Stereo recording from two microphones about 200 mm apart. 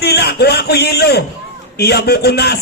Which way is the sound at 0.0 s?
55° left (ahead or behind).